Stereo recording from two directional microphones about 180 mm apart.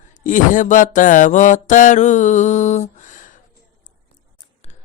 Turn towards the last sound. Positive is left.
turn(degrees=45)  # may be behind; listen again after turning